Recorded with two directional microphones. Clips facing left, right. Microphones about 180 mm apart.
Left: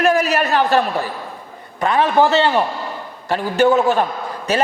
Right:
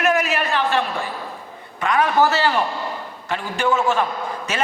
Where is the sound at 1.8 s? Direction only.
30° left (ahead or behind).